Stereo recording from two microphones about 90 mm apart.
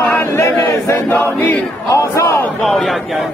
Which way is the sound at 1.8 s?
35° left (ahead or behind).